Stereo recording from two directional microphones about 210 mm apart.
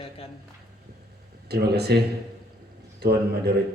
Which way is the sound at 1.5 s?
50° right (ahead or behind).